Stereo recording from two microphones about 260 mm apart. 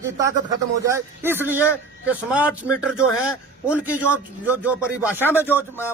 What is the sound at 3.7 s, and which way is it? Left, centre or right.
Speech, centre.